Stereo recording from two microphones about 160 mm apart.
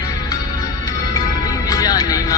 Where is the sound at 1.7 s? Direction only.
25° left (ahead or behind).